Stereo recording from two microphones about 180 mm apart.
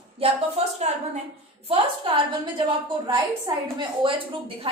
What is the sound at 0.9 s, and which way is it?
Speech, 40° right (ahead or behind).